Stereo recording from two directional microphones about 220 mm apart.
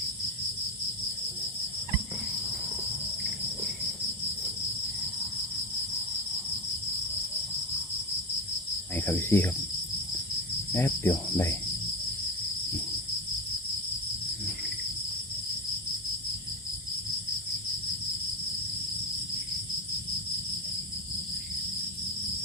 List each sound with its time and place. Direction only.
9.0 s cricket: 10° left (ahead or behind)
10.8 s cricket: 10° left (ahead or behind)